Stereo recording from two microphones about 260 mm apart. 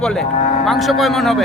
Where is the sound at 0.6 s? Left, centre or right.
Centre.